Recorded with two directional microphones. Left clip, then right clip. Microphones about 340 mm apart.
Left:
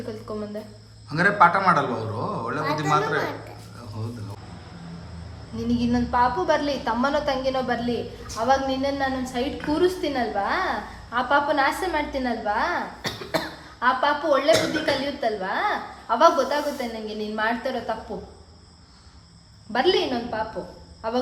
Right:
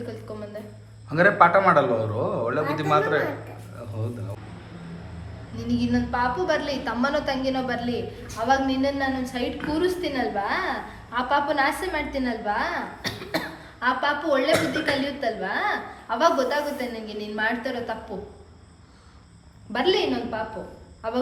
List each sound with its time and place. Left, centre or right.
0.3 s cricket: left
1.1 s a man's voice: centre
5.5 s a woman's voice: left
19.7 s a woman's voice: left